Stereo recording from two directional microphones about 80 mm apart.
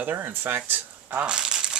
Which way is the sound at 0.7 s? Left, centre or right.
Centre.